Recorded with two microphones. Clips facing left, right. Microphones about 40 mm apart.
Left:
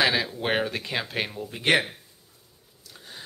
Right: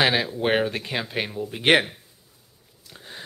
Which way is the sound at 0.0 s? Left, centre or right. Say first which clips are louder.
Right 3 dB; centre.